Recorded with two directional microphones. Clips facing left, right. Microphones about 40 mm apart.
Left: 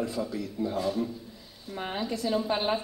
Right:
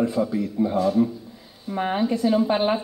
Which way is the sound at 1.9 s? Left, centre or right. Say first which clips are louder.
Right 8 dB; right.